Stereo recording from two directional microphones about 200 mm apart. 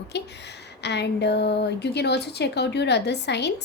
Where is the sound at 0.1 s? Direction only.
60° left (ahead or behind).